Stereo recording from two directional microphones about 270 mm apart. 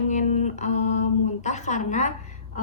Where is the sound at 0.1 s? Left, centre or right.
Left.